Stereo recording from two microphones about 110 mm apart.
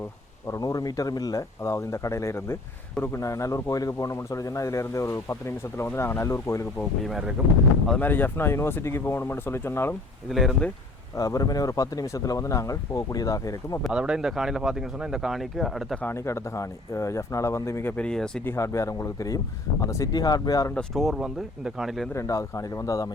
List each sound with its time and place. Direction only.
0.4 s speech: 30° left (ahead or behind)
6.7 s speech: centre (ahead or behind)
7.9 s speech: 15° left (ahead or behind)
10.2 s speech: centre (ahead or behind)
11.2 s speech: 30° left (ahead or behind)
13.8 s speech: 10° right (ahead or behind)
16.0 s speech: 25° left (ahead or behind)
17.9 s speech: 10° left (ahead or behind)
18.4 s speech: 25° left (ahead or behind)
20.7 s speech: centre (ahead or behind)
22.1 s speech: 30° left (ahead or behind)